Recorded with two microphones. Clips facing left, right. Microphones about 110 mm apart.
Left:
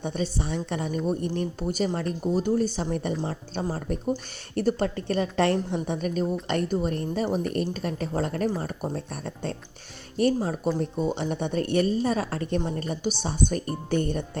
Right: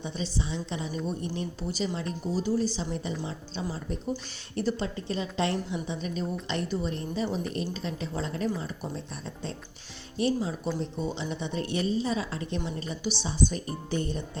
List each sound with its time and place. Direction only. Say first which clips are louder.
0.0 s a woman's voice: left 4 dB; 55° left (ahead or behind)